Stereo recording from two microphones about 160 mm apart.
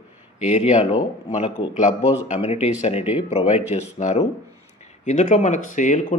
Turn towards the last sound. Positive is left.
turn(degrees=50)  # may be behind; listen again after turning